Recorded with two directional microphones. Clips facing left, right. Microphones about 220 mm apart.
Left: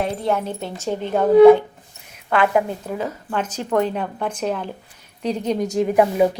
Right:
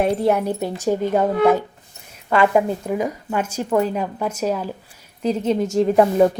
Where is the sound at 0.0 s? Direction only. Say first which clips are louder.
Right 4 dB; 15° right (ahead or behind).